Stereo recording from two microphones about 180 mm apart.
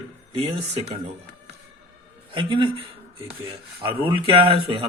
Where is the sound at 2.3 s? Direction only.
30° right (ahead or behind).